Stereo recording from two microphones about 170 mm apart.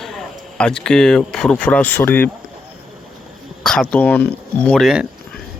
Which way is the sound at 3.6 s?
5° left (ahead or behind).